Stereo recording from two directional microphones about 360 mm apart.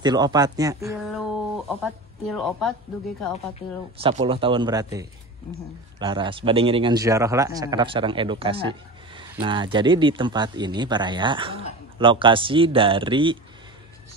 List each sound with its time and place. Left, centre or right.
0.0 s a man's voice: centre
4.0 s a man's voice: centre
5.9 s a man's voice: centre